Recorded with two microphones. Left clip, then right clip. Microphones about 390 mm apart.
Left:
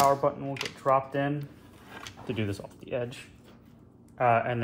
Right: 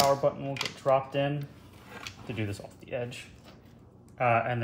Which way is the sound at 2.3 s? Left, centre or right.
Centre.